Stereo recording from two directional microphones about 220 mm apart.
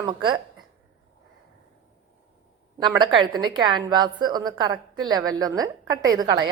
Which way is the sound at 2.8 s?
20° right (ahead or behind).